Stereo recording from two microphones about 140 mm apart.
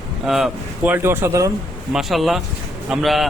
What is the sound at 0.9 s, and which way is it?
Speech, 15° right (ahead or behind).